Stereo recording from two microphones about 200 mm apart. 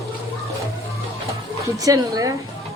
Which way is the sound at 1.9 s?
15° right (ahead or behind).